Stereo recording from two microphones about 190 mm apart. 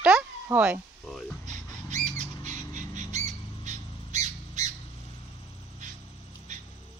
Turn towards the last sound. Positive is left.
turn(degrees=-40)  # may be behind; listen again after turning